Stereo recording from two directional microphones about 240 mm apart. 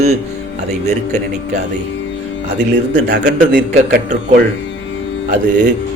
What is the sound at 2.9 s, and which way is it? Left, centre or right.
A man's voice, right.